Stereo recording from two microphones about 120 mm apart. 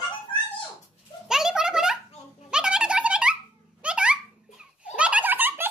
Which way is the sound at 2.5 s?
5° right (ahead or behind).